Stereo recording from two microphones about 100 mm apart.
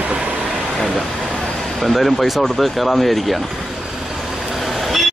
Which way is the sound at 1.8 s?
Centre (ahead or behind).